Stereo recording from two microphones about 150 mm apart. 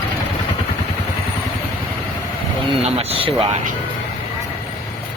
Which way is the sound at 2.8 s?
40° right (ahead or behind).